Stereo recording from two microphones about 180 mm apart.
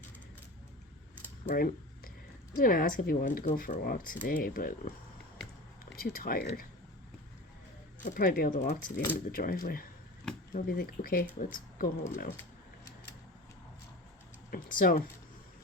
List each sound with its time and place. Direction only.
1.5 s speech: 50° left (ahead or behind)
6.0 s speech: 55° left (ahead or behind)
8.0 s speech: 50° left (ahead or behind)
14.5 s speech: 50° left (ahead or behind)